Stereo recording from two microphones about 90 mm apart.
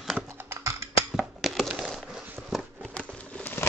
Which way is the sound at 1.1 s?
Centre (ahead or behind).